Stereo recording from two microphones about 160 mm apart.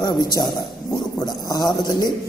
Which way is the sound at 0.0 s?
25° left (ahead or behind).